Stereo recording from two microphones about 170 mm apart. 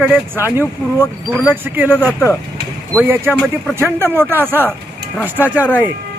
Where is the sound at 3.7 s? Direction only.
15° right (ahead or behind).